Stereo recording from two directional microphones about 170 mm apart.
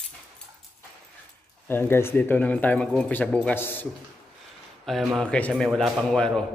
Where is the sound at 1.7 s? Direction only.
15° left (ahead or behind).